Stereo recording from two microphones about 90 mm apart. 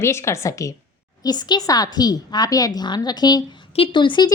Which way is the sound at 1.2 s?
50° left (ahead or behind).